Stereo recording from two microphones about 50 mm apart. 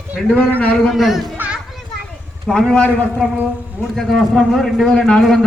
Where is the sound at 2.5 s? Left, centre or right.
Centre.